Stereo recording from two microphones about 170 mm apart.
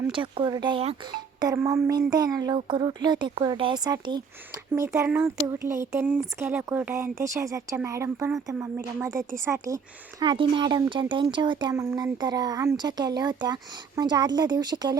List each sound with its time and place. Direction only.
0.1 s speech: 30° right (ahead or behind)